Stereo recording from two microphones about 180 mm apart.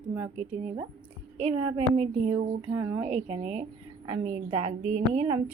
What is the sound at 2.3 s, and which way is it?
Speech, 15° right (ahead or behind).